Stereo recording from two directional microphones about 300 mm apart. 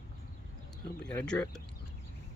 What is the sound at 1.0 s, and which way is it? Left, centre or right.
Speech, centre.